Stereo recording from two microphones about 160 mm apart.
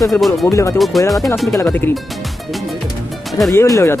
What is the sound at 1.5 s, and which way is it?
Speech, 15° left (ahead or behind).